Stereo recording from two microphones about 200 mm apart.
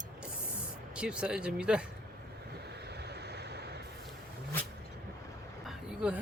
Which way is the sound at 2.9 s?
55° right (ahead or behind).